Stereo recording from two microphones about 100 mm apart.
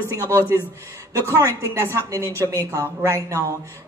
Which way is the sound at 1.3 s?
30° right (ahead or behind).